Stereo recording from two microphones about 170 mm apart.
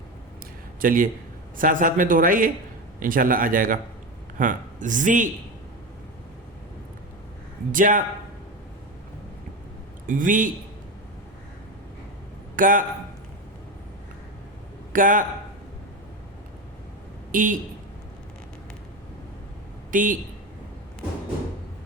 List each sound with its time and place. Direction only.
0.8 s speech: 55° right (ahead or behind)
7.7 s speech: 50° right (ahead or behind)
10.1 s speech: 50° right (ahead or behind)
12.5 s speech: 50° right (ahead or behind)
14.9 s speech: 50° right (ahead or behind)
17.3 s speech: 50° right (ahead or behind)
19.9 s speech: 50° right (ahead or behind)